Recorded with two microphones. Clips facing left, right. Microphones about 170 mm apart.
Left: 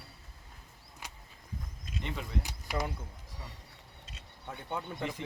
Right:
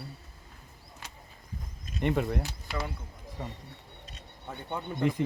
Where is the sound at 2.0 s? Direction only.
55° right (ahead or behind).